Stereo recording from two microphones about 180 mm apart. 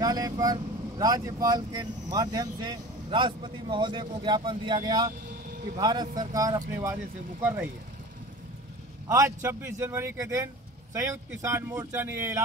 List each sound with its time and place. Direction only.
0.0 s speech: 20° right (ahead or behind)
7.4 s speech: 10° right (ahead or behind)
9.0 s speech: 15° right (ahead or behind)